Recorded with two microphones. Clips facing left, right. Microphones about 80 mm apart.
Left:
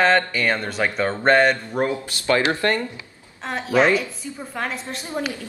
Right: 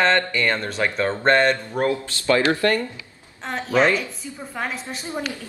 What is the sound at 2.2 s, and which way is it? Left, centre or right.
Speech, left.